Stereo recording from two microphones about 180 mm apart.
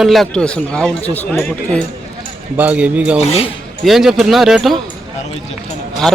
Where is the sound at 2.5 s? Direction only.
10° right (ahead or behind).